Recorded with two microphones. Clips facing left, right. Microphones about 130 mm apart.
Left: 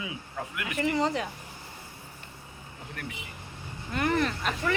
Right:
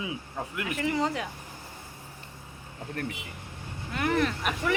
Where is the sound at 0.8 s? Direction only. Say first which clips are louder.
Left 2 dB; centre (ahead or behind).